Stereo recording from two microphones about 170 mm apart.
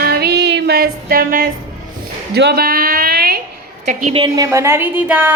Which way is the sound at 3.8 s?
45° right (ahead or behind).